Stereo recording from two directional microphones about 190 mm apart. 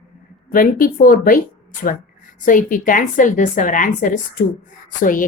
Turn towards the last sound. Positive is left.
turn(degrees=45)  # may be behind; listen again after turning